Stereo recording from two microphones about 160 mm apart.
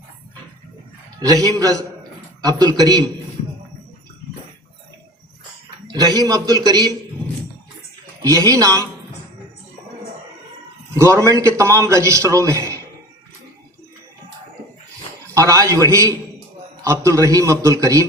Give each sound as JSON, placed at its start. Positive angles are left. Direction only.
{"t": 1.2, "sound": "a man's voice", "side_deg": -25}
{"t": 5.9, "sound": "a man's voice", "side_deg": -25}
{"t": 8.2, "sound": "a man's voice", "side_deg": -20}
{"t": 10.9, "sound": "a man's voice", "side_deg": -20}
{"t": 15.4, "sound": "a man's voice", "side_deg": -20}